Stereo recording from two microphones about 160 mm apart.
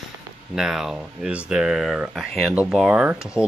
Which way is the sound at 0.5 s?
5° right (ahead or behind).